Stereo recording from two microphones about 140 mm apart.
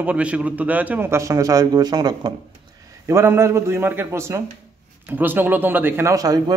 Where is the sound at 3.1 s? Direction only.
20° right (ahead or behind).